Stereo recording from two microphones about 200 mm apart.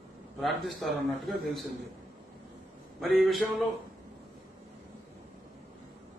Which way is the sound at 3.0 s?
Centre (ahead or behind).